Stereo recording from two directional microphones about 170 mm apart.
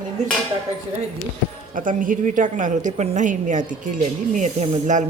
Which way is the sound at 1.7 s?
55° right (ahead or behind).